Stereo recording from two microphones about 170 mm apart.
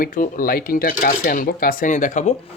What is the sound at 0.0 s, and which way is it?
Speech, 55° left (ahead or behind).